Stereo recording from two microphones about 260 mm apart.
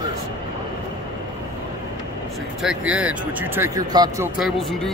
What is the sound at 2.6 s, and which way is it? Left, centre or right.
Speech, centre.